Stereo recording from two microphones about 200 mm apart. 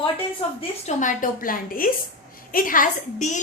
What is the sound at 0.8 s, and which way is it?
A woman's voice, 40° left (ahead or behind).